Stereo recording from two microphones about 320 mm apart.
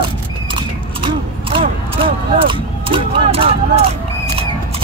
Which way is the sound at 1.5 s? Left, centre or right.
Centre.